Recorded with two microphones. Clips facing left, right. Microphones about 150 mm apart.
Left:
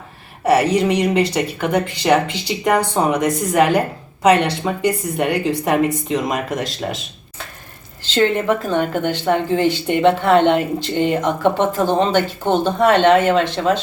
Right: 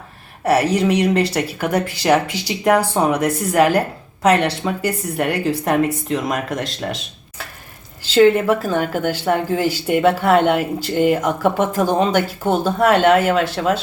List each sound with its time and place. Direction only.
0.4 s a woman's voice: centre (ahead or behind)